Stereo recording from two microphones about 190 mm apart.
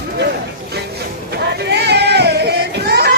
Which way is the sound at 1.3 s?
60° right (ahead or behind).